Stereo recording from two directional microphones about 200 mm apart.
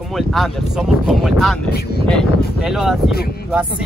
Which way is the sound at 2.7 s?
Centre (ahead or behind).